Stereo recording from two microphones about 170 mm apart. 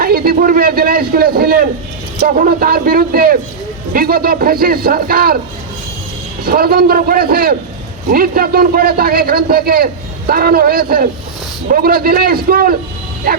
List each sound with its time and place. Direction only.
0.0 s a man's voice: 60° right (ahead or behind)
6.4 s a man's voice: 60° right (ahead or behind)